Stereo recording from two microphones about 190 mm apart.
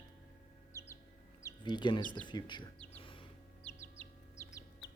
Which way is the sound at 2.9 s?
25° left (ahead or behind).